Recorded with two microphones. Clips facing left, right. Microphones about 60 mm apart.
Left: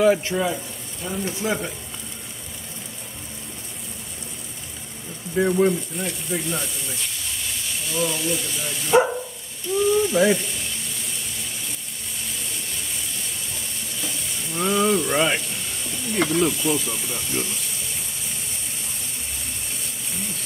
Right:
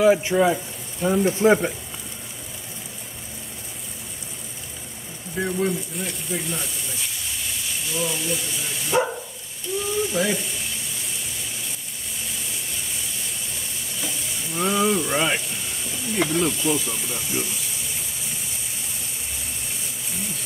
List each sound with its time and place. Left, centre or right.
0.0 s speech: centre
1.4 s frying: right
5.3 s speech: centre
9.8 s ratchet: centre
12.4 s a sound: centre
13.9 s sizzle: centre
20.1 s a sound: centre